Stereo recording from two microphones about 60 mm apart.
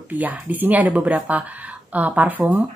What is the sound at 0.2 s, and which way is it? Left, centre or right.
A woman's voice, right.